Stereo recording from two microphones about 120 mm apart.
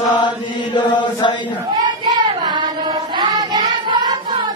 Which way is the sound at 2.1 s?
40° right (ahead or behind).